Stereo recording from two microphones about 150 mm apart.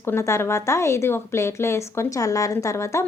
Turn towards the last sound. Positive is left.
turn(degrees=20)  # may be behind; listen again after turning